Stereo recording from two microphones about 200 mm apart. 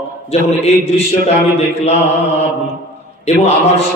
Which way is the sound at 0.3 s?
30° left (ahead or behind).